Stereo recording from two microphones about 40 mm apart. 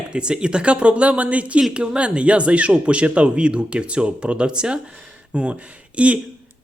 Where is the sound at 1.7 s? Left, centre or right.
Right.